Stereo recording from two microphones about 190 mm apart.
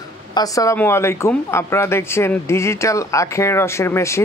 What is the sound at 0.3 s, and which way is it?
Speech, 20° left (ahead or behind).